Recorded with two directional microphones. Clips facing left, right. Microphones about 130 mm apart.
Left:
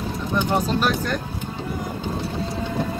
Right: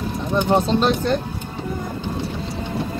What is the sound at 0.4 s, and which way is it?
Speech, 30° right (ahead or behind).